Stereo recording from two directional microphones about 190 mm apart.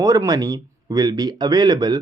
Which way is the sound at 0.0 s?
15° right (ahead or behind).